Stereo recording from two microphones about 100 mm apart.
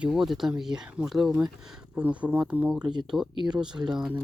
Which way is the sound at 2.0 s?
15° right (ahead or behind).